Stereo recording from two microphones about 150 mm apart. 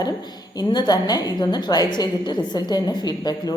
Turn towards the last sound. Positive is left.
turn(degrees=25)  # may be behind; listen again after turning